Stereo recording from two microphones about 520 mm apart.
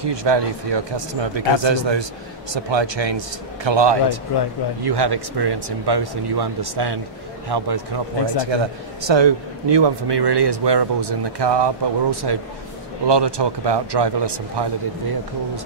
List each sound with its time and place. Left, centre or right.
0.0 s a man's voice: right
8.5 s a man's voice: right